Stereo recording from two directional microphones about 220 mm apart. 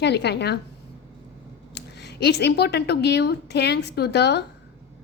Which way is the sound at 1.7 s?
50° left (ahead or behind).